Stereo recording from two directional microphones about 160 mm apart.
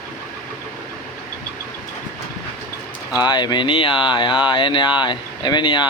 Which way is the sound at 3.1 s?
25° left (ahead or behind).